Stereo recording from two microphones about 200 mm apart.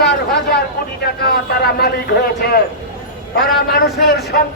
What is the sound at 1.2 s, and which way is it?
Speech, 50° left (ahead or behind).